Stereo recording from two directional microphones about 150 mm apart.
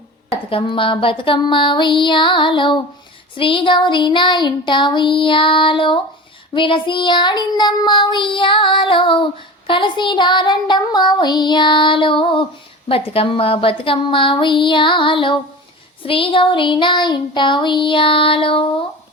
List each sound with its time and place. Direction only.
0.5 s child singing: 35° left (ahead or behind)